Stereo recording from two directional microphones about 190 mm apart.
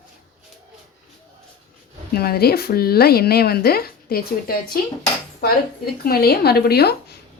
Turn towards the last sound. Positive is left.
turn(degrees=55)  # may be behind; listen again after turning